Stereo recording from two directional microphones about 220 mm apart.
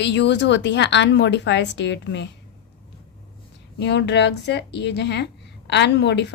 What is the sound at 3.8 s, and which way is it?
A woman's voice, 50° left (ahead or behind).